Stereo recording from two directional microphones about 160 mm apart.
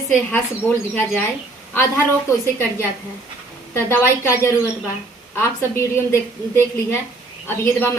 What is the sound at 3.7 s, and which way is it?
A woman's voice, 15° left (ahead or behind).